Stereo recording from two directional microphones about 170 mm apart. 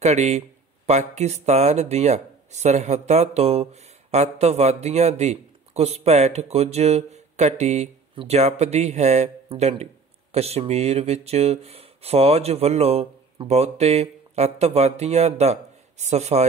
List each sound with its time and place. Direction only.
0.0 s speech: 40° right (ahead or behind)